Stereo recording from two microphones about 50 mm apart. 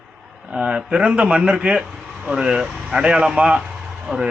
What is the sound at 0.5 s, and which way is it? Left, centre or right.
A man's voice, centre.